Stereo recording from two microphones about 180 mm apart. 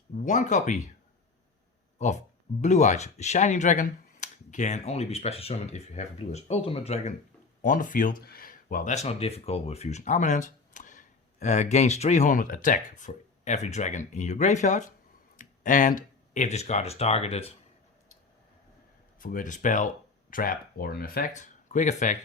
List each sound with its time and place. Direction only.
0.2 s speech: 45° left (ahead or behind)
2.0 s speech: 40° left (ahead or behind)
19.2 s speech: 50° left (ahead or behind)